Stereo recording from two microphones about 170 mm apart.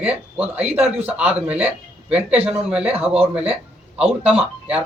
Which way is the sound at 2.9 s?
35° right (ahead or behind).